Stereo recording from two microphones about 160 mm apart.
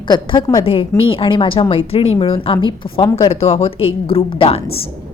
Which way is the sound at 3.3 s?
40° left (ahead or behind).